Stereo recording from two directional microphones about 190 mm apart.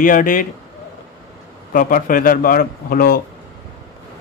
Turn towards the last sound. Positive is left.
turn(degrees=50)  # may be behind; listen again after turning